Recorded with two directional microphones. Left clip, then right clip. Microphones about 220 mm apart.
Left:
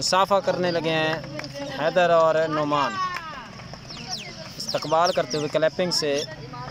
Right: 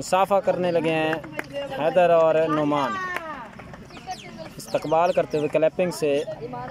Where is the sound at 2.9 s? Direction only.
40° right (ahead or behind).